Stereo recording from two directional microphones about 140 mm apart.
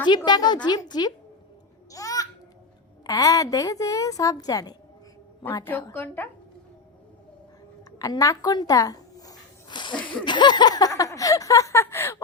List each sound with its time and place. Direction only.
0.3 s speech: 30° left (ahead or behind)
1.9 s babbling: 25° left (ahead or behind)
3.1 s a woman's voice: 25° left (ahead or behind)
5.6 s a woman's voice: 15° left (ahead or behind)
7.9 s a sound: 25° left (ahead or behind)
10.2 s speech: 35° left (ahead or behind)